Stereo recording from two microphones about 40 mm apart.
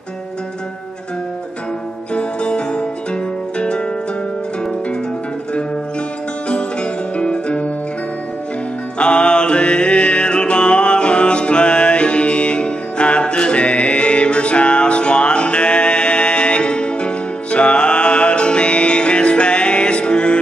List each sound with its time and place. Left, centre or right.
2.1 s music: left
6.5 s music: left
8.9 s music: left